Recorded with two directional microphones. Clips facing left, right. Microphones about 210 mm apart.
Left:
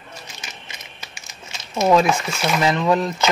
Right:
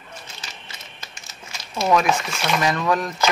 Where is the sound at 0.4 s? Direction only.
15° left (ahead or behind).